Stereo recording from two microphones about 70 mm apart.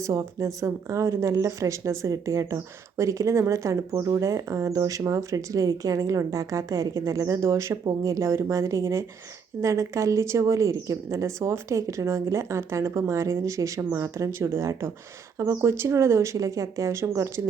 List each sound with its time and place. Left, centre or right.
0.0 s speech: right